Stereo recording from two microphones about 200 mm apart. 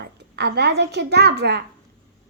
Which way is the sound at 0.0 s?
55° right (ahead or behind).